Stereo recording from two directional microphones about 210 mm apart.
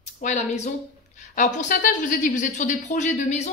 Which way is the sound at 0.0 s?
35° left (ahead or behind).